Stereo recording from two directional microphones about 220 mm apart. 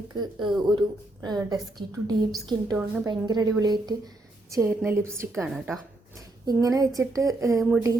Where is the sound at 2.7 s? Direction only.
10° right (ahead or behind).